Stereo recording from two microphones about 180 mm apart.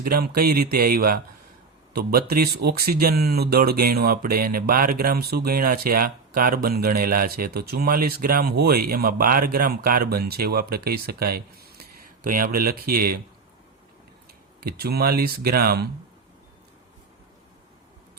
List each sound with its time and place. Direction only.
0.0 s speech: 55° right (ahead or behind)
14.6 s speech: 60° right (ahead or behind)